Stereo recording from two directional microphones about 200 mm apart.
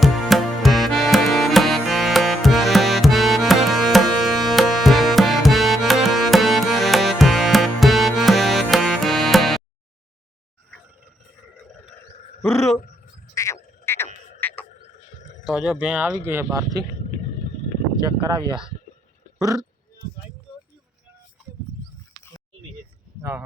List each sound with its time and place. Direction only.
0.0 s music: centre (ahead or behind)
12.4 s a sound: 15° left (ahead or behind)
13.3 s frog: 15° left (ahead or behind)
14.4 s cricket: 10° left (ahead or behind)
15.4 s speech: 5° right (ahead or behind)
18.2 s speech: 25° right (ahead or behind)